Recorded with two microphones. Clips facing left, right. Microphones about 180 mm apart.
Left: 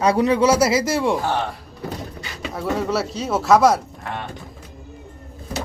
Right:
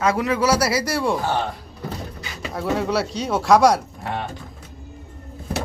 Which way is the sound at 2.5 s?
Centre (ahead or behind).